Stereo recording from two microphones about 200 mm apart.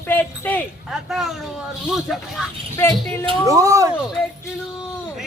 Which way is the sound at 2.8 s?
10° left (ahead or behind).